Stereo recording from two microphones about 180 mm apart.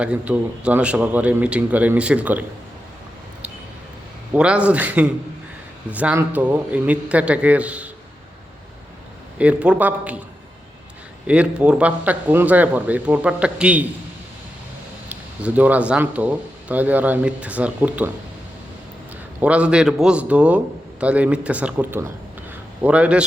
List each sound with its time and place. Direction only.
0.0 s speech: 5° right (ahead or behind)
4.4 s speech: 5° right (ahead or behind)
9.4 s speech: 5° right (ahead or behind)
11.3 s speech: 5° right (ahead or behind)
15.1 s speech: 10° right (ahead or behind)
19.4 s speech: 5° right (ahead or behind)